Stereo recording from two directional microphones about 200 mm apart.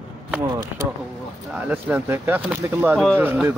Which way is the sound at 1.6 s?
10° right (ahead or behind).